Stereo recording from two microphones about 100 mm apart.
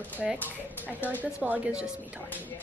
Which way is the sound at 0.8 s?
15° right (ahead or behind).